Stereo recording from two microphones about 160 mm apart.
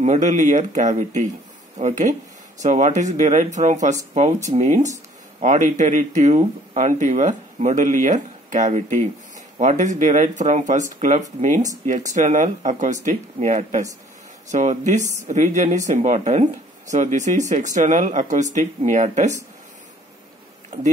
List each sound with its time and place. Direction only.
0.0 s speech: 50° right (ahead or behind)